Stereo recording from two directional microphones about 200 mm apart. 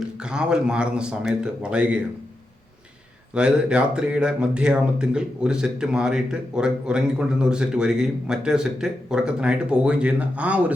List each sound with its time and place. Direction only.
0.2 s speech: 5° right (ahead or behind)
3.3 s speech: 5° right (ahead or behind)